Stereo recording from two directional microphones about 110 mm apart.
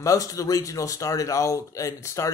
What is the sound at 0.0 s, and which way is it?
A man's voice, 30° left (ahead or behind).